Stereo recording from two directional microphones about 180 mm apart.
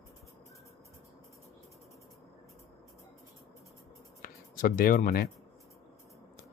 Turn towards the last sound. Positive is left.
turn(degrees=50)  # may be behind; listen again after turning